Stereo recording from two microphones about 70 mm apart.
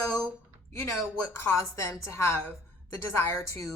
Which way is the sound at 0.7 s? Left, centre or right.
Left.